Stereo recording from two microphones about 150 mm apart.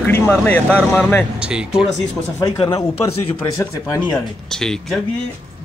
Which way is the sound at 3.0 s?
20° left (ahead or behind).